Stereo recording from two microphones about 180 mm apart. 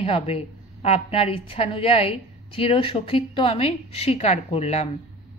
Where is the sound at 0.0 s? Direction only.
35° left (ahead or behind).